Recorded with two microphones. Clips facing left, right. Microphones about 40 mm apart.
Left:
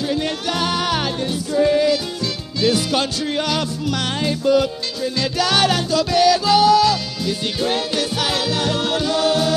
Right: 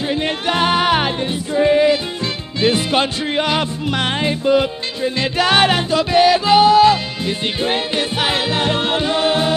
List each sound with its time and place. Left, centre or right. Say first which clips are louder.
0.1 s music: right 3 dB; right